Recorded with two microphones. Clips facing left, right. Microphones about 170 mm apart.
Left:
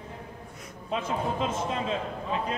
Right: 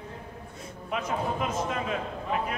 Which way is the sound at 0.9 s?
25° left (ahead or behind).